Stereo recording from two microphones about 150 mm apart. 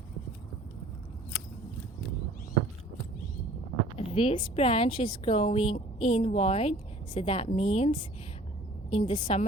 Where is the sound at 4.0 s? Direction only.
35° left (ahead or behind).